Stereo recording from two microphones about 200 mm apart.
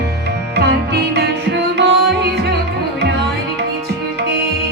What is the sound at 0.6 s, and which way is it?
Music, 55° right (ahead or behind).